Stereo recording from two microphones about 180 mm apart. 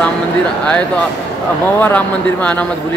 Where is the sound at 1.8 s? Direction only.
10° left (ahead or behind).